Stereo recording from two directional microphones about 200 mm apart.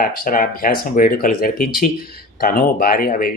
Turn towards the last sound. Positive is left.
turn(degrees=45)  # may be behind; listen again after turning